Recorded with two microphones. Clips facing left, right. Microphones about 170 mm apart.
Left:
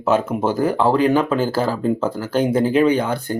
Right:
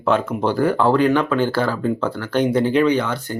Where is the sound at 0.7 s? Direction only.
Centre (ahead or behind).